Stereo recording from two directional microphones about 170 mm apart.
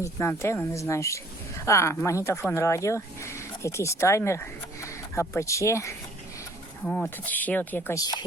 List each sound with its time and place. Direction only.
0.0 s speech: 15° left (ahead or behind)
6.8 s speech: centre (ahead or behind); by 8.2 s 20° left (ahead or behind)